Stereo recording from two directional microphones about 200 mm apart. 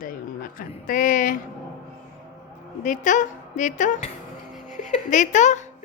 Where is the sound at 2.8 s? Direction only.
40° left (ahead or behind).